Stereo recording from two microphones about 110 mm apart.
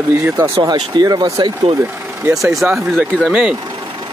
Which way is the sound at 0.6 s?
40° right (ahead or behind).